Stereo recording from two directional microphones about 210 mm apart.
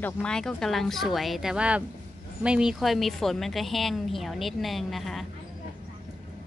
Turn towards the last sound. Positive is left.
turn(degrees=0)  # may be behind; listen again after turning